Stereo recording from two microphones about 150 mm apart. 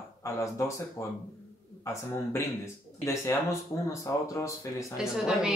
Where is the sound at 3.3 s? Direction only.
20° left (ahead or behind).